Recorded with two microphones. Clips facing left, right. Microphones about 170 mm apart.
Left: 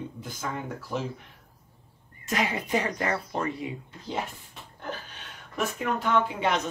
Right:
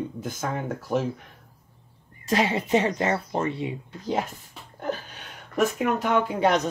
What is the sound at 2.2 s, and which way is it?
Speech, 30° right (ahead or behind).